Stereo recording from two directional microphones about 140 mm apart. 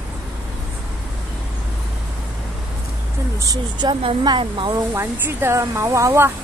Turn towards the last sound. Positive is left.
turn(degrees=-20)  # may be behind; listen again after turning